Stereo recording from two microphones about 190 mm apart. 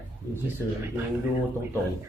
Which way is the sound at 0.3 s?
15° left (ahead or behind).